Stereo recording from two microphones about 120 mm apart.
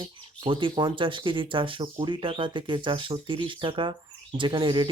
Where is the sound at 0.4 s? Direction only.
45° right (ahead or behind).